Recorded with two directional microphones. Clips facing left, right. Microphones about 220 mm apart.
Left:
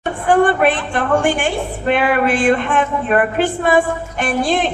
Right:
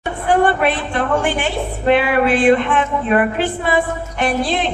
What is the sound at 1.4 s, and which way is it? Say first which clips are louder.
Speech: left 1 dB; 50° left (ahead or behind).